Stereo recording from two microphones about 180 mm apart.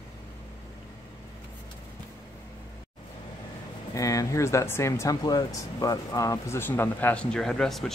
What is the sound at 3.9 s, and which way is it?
Speech, 20° left (ahead or behind).